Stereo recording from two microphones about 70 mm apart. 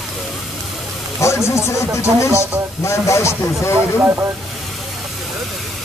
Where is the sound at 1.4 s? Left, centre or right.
Left.